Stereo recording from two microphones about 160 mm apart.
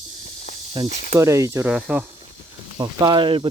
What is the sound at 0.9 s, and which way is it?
Speech, 50° left (ahead or behind).